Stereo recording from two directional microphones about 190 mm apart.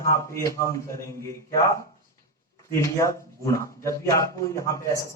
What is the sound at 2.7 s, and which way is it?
A man's voice, 15° left (ahead or behind).